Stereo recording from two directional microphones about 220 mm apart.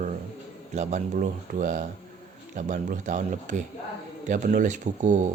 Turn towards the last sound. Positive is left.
turn(degrees=-35)  # may be behind; listen again after turning